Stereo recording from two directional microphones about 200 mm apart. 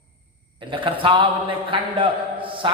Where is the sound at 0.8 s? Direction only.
25° right (ahead or behind).